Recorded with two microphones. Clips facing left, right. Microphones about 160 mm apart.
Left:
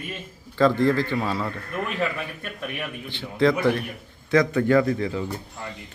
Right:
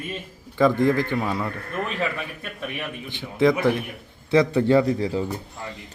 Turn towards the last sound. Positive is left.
turn(degrees=-30)  # may be behind; listen again after turning